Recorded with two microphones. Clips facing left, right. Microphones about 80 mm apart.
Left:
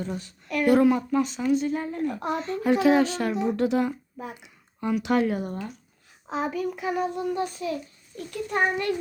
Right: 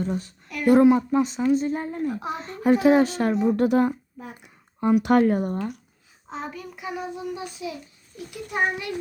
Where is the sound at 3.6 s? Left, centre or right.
Right.